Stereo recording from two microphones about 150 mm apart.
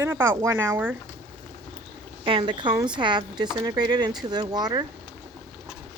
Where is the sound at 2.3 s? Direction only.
35° right (ahead or behind).